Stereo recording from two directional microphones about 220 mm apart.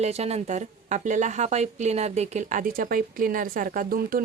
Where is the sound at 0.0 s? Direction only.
30° right (ahead or behind).